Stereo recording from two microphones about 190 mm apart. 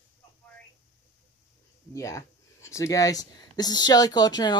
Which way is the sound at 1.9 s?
15° left (ahead or behind).